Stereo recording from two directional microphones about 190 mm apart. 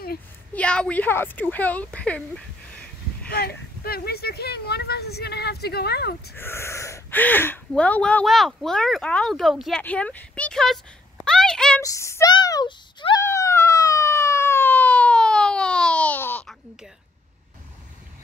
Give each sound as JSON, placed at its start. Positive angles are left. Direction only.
{"t": 0.6, "sound": "speech", "side_deg": 5}
{"t": 3.3, "sound": "speech", "side_deg": 50}
{"t": 6.3, "sound": "speech", "side_deg": 10}
{"t": 11.8, "sound": "speech", "side_deg": 15}
{"t": 13.2, "sound": "a sound", "side_deg": 15}